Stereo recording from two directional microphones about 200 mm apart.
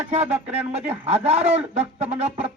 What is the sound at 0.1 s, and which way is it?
A man's voice, 35° right (ahead or behind).